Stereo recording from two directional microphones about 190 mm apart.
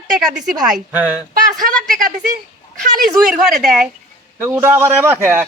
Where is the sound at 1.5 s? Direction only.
45° right (ahead or behind).